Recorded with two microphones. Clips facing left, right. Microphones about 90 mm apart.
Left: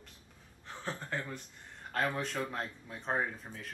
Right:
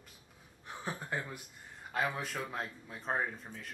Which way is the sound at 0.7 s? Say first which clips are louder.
Even; 10° right (ahead or behind).